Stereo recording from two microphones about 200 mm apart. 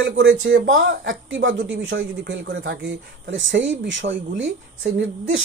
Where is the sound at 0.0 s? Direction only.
65° right (ahead or behind).